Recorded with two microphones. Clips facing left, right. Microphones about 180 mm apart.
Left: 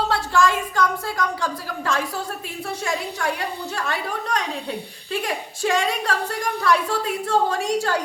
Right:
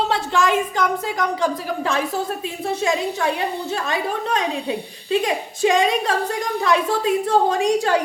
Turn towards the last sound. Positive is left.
turn(degrees=-20)  # may be behind; listen again after turning